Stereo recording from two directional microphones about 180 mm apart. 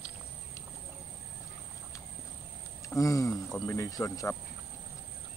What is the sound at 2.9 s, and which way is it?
Speech, 20° left (ahead or behind).